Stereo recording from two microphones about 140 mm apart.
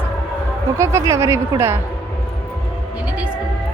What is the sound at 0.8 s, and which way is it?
Speech, 20° right (ahead or behind).